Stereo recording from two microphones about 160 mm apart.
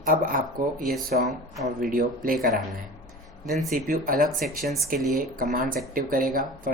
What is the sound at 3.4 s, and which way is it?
Speech, centre (ahead or behind).